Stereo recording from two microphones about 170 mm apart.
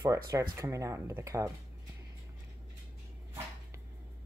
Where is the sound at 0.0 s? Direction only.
20° right (ahead or behind).